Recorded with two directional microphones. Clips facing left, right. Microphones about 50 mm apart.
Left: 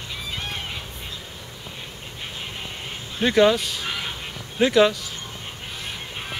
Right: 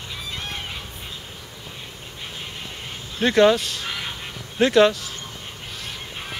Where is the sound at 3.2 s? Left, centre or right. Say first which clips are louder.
Right 1 dB; centre.